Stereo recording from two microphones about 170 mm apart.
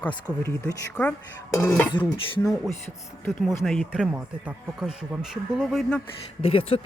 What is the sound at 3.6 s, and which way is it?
Speech, centre (ahead or behind).